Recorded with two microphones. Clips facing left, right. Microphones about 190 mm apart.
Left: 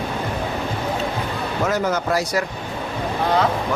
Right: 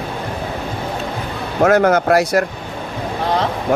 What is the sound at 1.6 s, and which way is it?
Speech, 60° right (ahead or behind).